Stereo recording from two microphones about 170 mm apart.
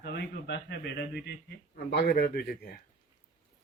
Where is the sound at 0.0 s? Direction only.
80° left.